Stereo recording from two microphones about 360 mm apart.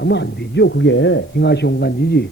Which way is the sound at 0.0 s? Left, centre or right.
Left.